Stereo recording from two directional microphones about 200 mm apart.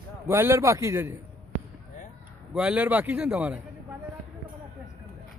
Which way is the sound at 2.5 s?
5° right (ahead or behind).